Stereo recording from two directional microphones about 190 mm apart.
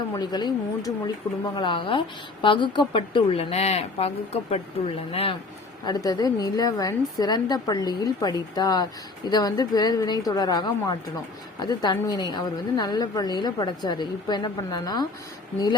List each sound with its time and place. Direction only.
0.1 s a woman's voice: 20° left (ahead or behind)